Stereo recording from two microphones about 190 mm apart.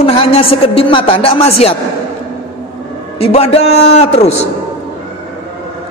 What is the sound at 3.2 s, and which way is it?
Speech, 30° left (ahead or behind).